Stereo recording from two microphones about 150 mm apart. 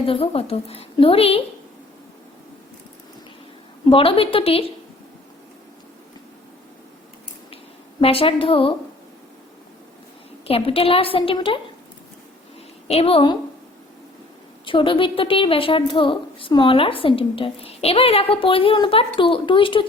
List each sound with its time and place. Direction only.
0.0 s a woman's voice: 40° left (ahead or behind)
3.8 s a woman's voice: 35° left (ahead or behind)
8.0 s a woman's voice: 40° left (ahead or behind)
10.4 s a woman's voice: 40° left (ahead or behind)
12.9 s a woman's voice: 40° left (ahead or behind)
14.6 s a woman's voice: 35° left (ahead or behind)